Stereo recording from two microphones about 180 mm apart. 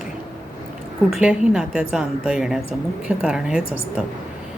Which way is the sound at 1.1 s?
5° right (ahead or behind).